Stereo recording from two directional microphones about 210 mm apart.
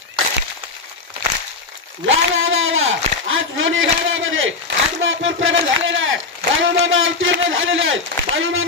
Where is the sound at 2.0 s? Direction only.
70° right (ahead or behind).